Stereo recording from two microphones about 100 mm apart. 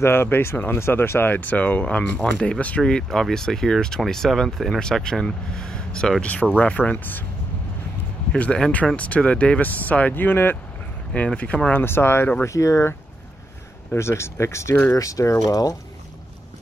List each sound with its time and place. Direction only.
0.0 s speech: 25° left (ahead or behind)
8.3 s speech: 10° left (ahead or behind); by 12.9 s 30° left (ahead or behind)
13.9 s speech: 25° left (ahead or behind)